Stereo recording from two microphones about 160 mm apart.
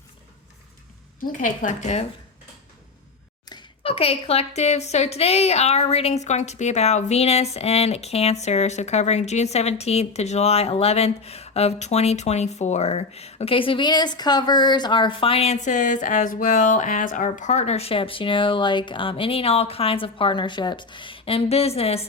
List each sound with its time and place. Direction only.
1.2 s speech: 55° left (ahead or behind)
3.4 s a woman's voice: 25° left (ahead or behind)